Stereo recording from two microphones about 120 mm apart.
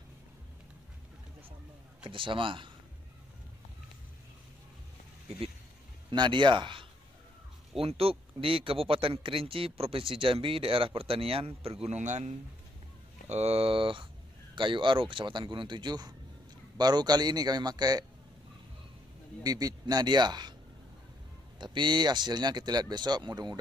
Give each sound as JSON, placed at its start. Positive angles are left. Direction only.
{"t": 2.0, "sound": "speech", "side_deg": -45}
{"t": 6.0, "sound": "speech", "side_deg": -40}
{"t": 13.3, "sound": "speech", "side_deg": -60}
{"t": 19.4, "sound": "speech", "side_deg": -30}
{"t": 21.5, "sound": "speech", "side_deg": -40}